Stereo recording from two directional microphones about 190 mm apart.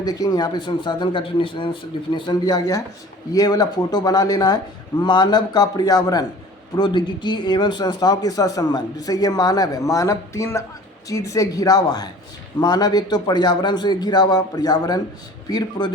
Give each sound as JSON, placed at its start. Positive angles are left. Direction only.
{"t": 0.0, "sound": "speech", "side_deg": 20}